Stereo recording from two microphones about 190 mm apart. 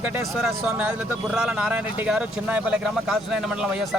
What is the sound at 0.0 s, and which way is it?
Speech, 10° right (ahead or behind).